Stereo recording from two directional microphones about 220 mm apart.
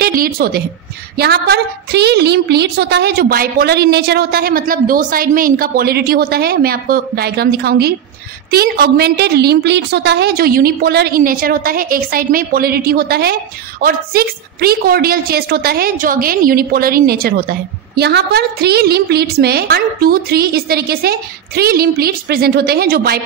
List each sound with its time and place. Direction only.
0.0 s a woman's voice: 40° right (ahead or behind)